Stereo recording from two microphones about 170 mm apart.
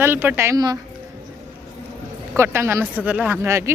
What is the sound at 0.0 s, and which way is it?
Speech, 10° right (ahead or behind).